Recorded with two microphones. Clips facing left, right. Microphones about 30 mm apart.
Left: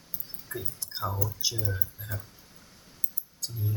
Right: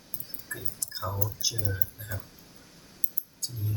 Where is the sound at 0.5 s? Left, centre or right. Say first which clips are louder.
Left 1 dB; centre.